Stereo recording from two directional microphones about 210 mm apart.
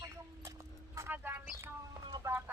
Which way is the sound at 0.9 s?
10° right (ahead or behind).